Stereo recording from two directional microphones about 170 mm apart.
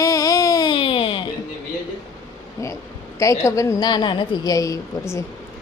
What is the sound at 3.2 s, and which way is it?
A woman's voice, 20° left (ahead or behind).